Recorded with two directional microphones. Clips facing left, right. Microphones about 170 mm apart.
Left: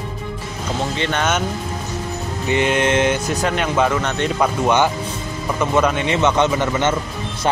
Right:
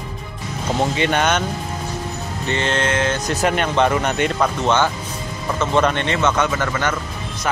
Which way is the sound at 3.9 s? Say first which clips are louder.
Right 1 dB; 10° right (ahead or behind).